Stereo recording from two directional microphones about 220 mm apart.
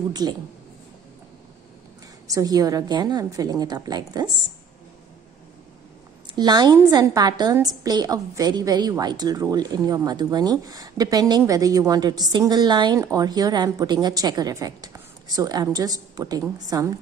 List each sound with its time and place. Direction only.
0.1 s speech: 20° right (ahead or behind)
2.2 s a woman's voice: 15° right (ahead or behind)
6.3 s a woman's voice: 20° right (ahead or behind)